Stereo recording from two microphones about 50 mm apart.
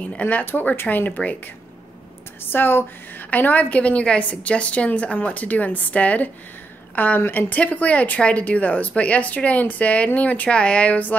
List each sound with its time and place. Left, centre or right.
0.1 s speech: left
0.5 s speech: left
2.5 s speech: left
7.2 s speech: left